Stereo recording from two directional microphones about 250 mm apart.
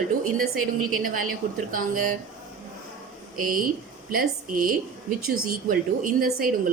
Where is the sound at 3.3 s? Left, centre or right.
Right.